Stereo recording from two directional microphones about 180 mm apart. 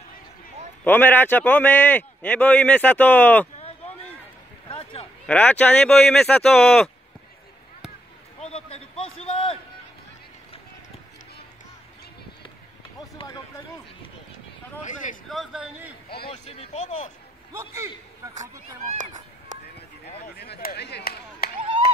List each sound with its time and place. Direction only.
0.8 s a man's voice: 10° left (ahead or behind)
3.5 s a sound: 35° left (ahead or behind)
5.2 s speech: 5° left (ahead or behind)
8.4 s a sound: 35° left (ahead or behind)
14.8 s speech: 45° left (ahead or behind)
15.2 s speech: centre (ahead or behind)
16.3 s speech: 35° left (ahead or behind)
17.5 s a man's voice: 15° right (ahead or behind)
20.3 s speech: 65° left (ahead or behind)